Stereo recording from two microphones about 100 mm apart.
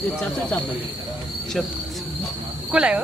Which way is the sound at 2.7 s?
10° right (ahead or behind).